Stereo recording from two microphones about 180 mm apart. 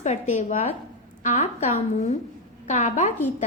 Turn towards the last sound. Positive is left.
turn(degrees=40)  # may be behind; listen again after turning